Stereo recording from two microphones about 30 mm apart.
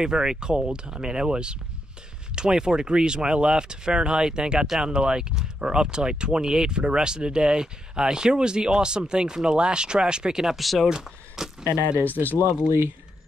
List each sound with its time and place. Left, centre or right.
0.0 s speech: right
10.6 s speech: centre
11.4 s speech: centre
11.8 s speech: left